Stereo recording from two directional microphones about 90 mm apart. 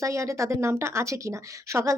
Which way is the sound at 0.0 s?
35° right (ahead or behind).